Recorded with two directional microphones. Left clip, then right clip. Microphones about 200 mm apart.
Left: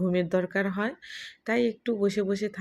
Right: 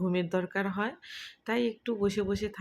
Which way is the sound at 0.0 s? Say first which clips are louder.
Left 4 dB; 10° left (ahead or behind).